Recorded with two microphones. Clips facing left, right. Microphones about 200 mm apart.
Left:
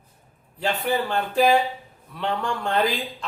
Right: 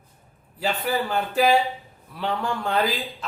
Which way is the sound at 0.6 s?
5° right (ahead or behind).